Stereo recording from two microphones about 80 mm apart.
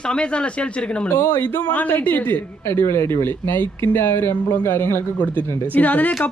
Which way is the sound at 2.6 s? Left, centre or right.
Left.